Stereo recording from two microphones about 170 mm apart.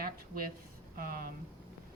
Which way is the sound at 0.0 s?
60° right (ahead or behind).